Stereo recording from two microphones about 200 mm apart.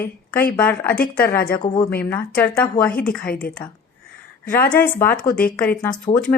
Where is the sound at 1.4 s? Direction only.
45° left (ahead or behind).